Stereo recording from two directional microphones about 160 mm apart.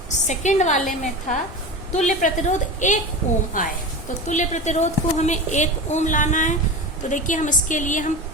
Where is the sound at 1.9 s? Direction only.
50° left (ahead or behind).